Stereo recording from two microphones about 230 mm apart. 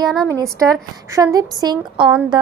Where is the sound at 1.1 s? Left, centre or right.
Centre.